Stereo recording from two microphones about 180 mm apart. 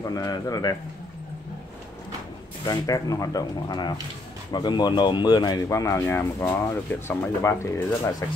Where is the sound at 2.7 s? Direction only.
20° left (ahead or behind).